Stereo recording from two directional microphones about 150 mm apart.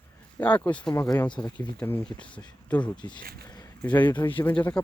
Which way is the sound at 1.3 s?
25° left (ahead or behind).